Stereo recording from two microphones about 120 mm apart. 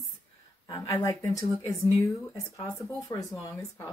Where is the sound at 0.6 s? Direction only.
30° left (ahead or behind).